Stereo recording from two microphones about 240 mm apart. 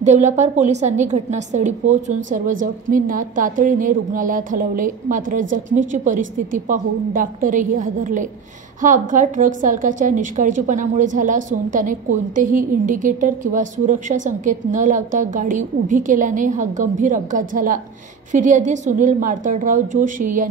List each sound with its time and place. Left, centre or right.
0.0 s a woman's voice: right